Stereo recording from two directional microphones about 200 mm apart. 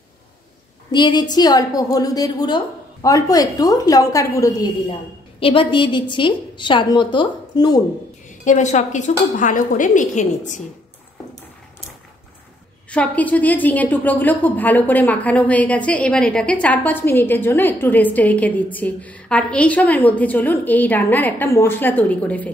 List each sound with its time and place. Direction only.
0.9 s a woman's voice: 20° left (ahead or behind)
8.3 s a woman's voice: 35° left (ahead or behind)
12.9 s a woman's voice: 5° left (ahead or behind)